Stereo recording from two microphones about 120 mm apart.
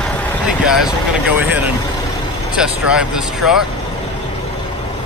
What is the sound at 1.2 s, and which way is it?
Speech, 15° right (ahead or behind).